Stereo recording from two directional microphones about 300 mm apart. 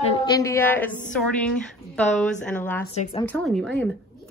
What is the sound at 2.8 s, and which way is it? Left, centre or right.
Speech, left.